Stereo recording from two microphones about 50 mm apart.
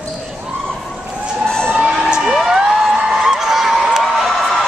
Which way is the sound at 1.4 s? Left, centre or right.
Centre.